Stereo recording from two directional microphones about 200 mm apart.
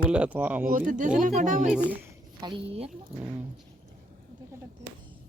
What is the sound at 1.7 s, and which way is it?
Speech, 5° right (ahead or behind).